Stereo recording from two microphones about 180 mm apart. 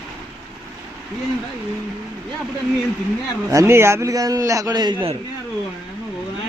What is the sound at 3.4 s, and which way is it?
A man's voice, 15° right (ahead or behind).